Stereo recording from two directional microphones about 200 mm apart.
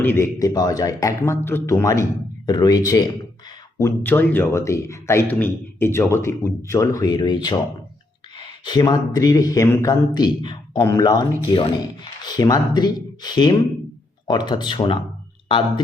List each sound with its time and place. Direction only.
0.0 s a man's voice: 10° left (ahead or behind)